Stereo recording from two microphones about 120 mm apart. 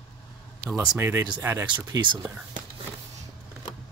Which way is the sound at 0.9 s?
20° right (ahead or behind).